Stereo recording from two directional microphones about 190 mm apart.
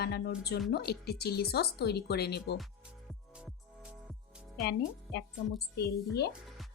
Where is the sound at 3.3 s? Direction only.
5° right (ahead or behind).